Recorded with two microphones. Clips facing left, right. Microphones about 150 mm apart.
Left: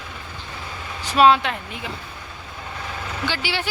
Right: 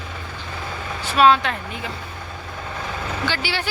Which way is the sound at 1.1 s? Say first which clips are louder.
Even; 15° left (ahead or behind).